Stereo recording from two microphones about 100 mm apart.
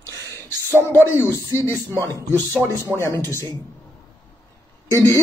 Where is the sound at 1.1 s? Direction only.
25° left (ahead or behind).